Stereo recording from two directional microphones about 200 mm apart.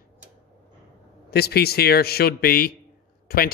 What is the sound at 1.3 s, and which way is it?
A man's voice, 50° left (ahead or behind).